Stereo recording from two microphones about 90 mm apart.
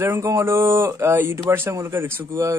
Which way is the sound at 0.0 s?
35° right (ahead or behind).